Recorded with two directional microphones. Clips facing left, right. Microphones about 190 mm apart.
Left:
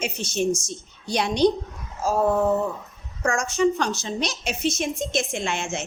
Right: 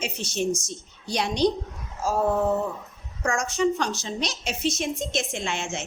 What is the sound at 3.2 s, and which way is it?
A woman's voice, 50° left (ahead or behind).